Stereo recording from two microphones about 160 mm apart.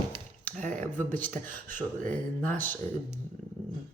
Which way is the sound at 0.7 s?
10° left (ahead or behind).